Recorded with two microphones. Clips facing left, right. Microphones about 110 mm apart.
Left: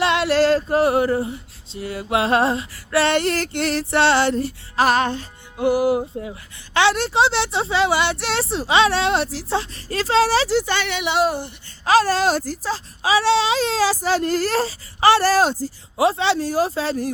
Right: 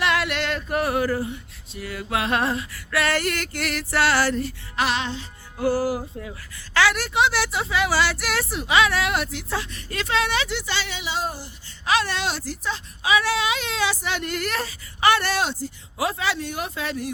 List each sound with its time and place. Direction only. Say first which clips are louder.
0.0 s female singing: left 7 dB; 30° left (ahead or behind)
4.9 s music: left 7 dB; 50° left (ahead or behind)
5.5 s a woman's voice: left 5 dB; 20° left (ahead or behind)
10.7 s a woman's voice: left 6 dB; 60° left (ahead or behind)
11.9 s speech: left 7 dB; 35° left (ahead or behind)
16.0 s speech: left 7 dB; 30° left (ahead or behind)